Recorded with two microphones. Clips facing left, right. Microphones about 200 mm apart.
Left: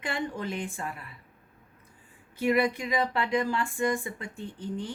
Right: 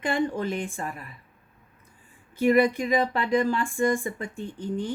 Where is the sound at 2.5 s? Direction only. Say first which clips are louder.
Right 5 dB; 45° right (ahead or behind).